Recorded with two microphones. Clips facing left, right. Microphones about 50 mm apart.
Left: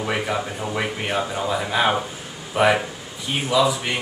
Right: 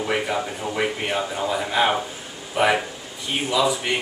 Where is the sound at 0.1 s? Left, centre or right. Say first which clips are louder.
Even; centre.